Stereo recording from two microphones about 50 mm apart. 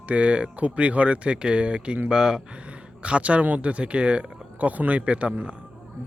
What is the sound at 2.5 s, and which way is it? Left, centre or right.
Speech, right.